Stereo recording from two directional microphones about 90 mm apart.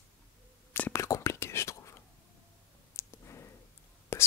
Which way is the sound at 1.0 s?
35° left (ahead or behind).